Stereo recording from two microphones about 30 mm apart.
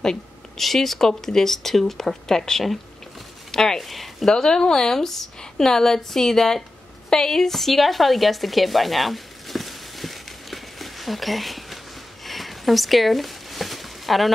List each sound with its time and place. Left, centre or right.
0.6 s speech: centre
3.8 s speech: centre
4.3 s speech: left
7.1 s a sound: centre
12.3 s zipper: centre